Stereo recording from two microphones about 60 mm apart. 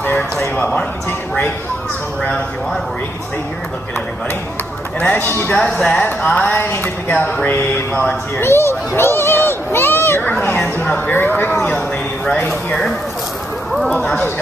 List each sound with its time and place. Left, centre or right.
5.0 s speech: left
5.3 s speech: left
5.6 s speech: centre
7.1 s a sound: left
8.4 s a sound: left
10.8 s speech: left
13.9 s speech: centre